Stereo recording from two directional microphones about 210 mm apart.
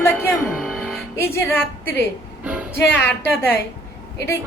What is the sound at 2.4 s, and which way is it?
Music, 5° right (ahead or behind).